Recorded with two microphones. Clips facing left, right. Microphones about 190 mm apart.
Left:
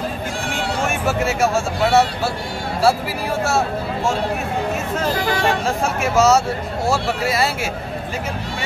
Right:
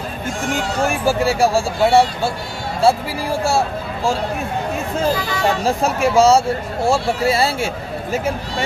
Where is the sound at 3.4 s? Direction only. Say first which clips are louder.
Right 1 dB; 30° right (ahead or behind).